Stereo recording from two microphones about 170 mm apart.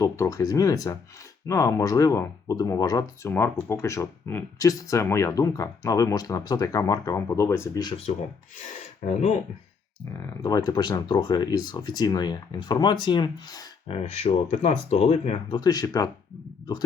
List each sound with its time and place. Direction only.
0.0 s speech: 20° left (ahead or behind)
10.2 s speech: 20° left (ahead or behind)
13.8 s speech: 35° left (ahead or behind)
15.6 s speech: 20° left (ahead or behind)